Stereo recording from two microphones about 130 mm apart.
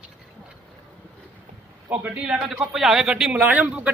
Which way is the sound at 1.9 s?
10° right (ahead or behind).